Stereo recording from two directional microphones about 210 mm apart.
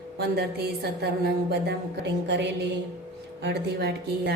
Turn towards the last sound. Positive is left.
turn(degrees=-50)  # may be behind; listen again after turning